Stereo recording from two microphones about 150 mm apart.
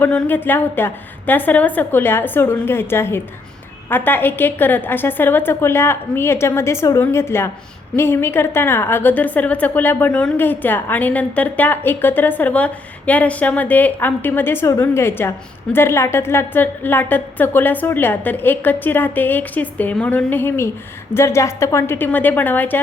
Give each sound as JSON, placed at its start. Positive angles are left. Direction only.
{"t": 0.0, "sound": "a woman's voice", "side_deg": 15}